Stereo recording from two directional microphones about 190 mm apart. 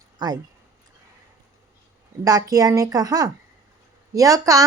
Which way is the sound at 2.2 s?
20° right (ahead or behind).